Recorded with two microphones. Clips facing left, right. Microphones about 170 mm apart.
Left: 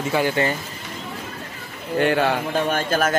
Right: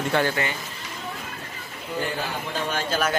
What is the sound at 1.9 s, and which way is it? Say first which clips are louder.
Speech: left 10 dB; 70° left (ahead or behind).